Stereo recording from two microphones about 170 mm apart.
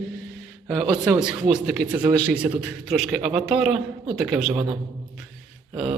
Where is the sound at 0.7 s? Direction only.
Centre (ahead or behind).